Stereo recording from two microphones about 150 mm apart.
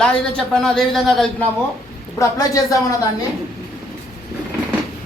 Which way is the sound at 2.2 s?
20° left (ahead or behind).